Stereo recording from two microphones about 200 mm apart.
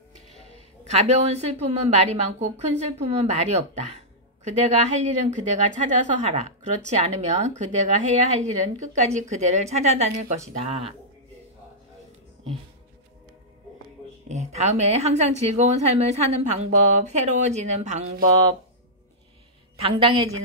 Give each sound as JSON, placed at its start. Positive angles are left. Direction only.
{"t": 0.5, "sound": "a woman's voice", "side_deg": -35}
{"t": 14.3, "sound": "a woman's voice", "side_deg": -35}
{"t": 19.8, "sound": "a woman's voice", "side_deg": -25}